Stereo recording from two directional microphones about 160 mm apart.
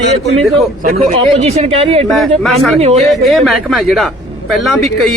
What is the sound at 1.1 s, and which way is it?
Speech, 45° right (ahead or behind).